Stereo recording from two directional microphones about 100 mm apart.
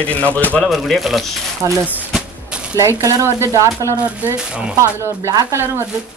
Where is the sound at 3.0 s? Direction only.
30° right (ahead or behind).